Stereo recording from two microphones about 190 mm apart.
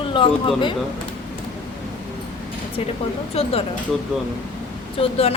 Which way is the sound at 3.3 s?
30° left (ahead or behind).